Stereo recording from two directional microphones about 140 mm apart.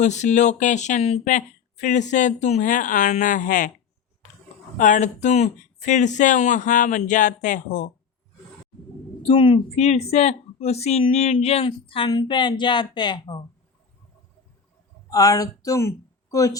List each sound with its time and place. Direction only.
0.0 s speech: 55° left (ahead or behind)
4.8 s speech: 60° left (ahead or behind)
9.2 s speech: 40° left (ahead or behind)
15.1 s speech: 25° left (ahead or behind)